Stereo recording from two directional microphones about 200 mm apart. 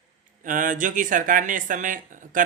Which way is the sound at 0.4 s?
40° right (ahead or behind).